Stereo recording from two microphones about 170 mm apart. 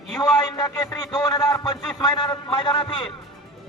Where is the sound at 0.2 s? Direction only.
20° left (ahead or behind).